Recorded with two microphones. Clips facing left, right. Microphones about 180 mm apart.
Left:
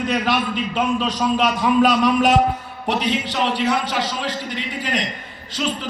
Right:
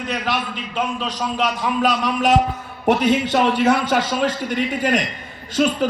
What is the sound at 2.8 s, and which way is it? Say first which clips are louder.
A man's voice: right 5 dB; 50° right (ahead or behind).